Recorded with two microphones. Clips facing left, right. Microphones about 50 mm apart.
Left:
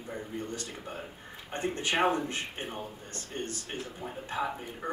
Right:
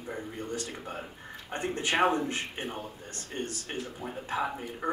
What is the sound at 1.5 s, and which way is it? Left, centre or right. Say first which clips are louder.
A man's voice: right 1 dB; right.